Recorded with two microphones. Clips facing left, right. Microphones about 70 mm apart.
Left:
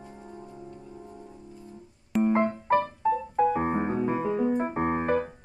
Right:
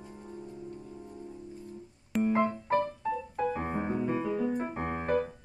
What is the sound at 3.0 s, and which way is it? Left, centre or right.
Piano, left.